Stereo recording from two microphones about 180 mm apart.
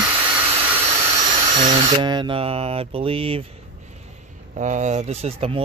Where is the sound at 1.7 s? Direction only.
25° right (ahead or behind).